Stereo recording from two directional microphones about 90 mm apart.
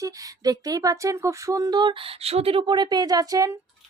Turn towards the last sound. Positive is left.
turn(degrees=-40)  # may be behind; listen again after turning